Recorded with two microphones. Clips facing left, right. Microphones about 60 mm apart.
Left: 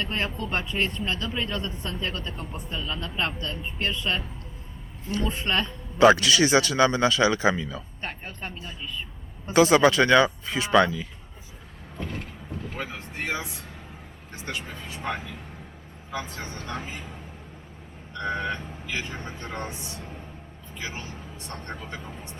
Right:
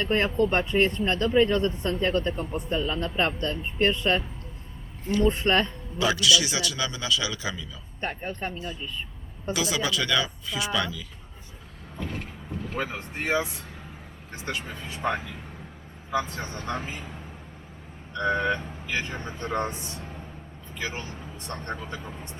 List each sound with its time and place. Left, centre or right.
0.0 s speech: right
2.3 s speech: centre
2.6 s speech: right
5.2 s speech: right
6.0 s a man's voice: left
8.0 s speech: right
9.5 s a man's voice: left
12.5 s speech: right
16.1 s speech: right
18.1 s speech: right